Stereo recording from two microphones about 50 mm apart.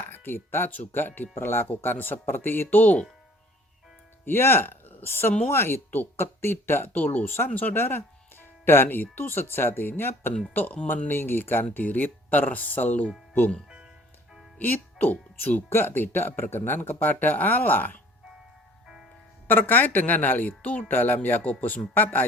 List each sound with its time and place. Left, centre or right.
0.1 s a woman's voice: left
4.3 s a woman's voice: left
7.3 s speech: left
7.5 s a woman's voice: left
7.8 s a woman's voice: left
13.7 s music: centre
14.6 s speech: left
15.7 s speech: left
19.5 s a woman's voice: left
20.9 s a woman's voice: left